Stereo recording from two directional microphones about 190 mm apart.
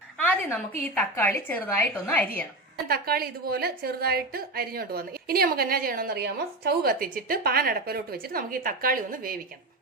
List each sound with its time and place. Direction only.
0.2 s a sound: 10° left (ahead or behind)
0.9 s speech: 10° left (ahead or behind)
2.9 s a woman's voice: 55° right (ahead or behind)